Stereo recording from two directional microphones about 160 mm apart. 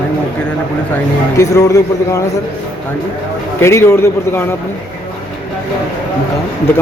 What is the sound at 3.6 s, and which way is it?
Speech, 15° left (ahead or behind).